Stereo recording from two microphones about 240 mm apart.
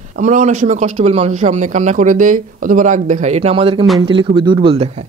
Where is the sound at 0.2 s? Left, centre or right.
Right.